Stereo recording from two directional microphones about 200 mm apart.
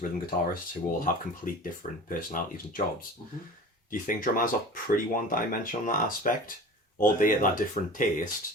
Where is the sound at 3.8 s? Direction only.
45° left (ahead or behind).